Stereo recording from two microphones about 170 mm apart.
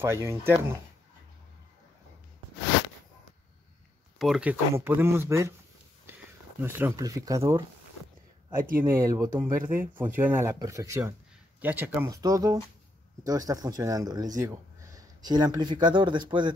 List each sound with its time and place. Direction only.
0.0 s speech: 15° right (ahead or behind)
4.2 s speech: 5° right (ahead or behind)
6.6 s speech: 15° right (ahead or behind)
8.8 s speech: 15° right (ahead or behind)